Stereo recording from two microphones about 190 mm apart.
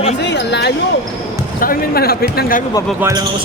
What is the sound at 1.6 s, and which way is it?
Speech, 50° left (ahead or behind).